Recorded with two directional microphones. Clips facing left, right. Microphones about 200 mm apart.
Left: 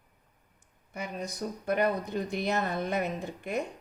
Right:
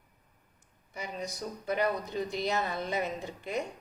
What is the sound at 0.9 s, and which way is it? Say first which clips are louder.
Speech: left 2 dB; 55° left (ahead or behind).